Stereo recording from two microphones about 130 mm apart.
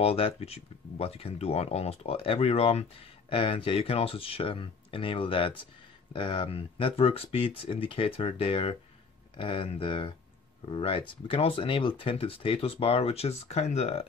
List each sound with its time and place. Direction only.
0.0 s speech: 50° left (ahead or behind)